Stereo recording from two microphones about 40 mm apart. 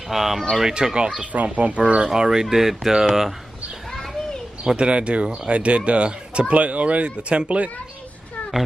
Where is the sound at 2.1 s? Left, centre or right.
Centre.